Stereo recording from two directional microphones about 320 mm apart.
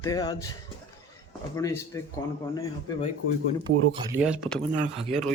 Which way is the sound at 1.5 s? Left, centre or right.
Centre.